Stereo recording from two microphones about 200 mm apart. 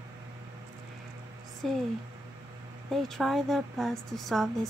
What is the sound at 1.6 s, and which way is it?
Speech, centre (ahead or behind).